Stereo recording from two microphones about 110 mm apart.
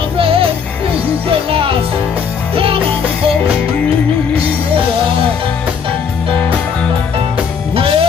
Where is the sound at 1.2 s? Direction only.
55° right (ahead or behind).